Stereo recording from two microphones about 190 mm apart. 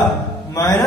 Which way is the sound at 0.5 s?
20° left (ahead or behind).